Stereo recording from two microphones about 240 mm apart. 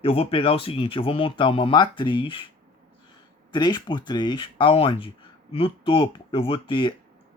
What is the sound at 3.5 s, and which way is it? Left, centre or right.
Speech, centre.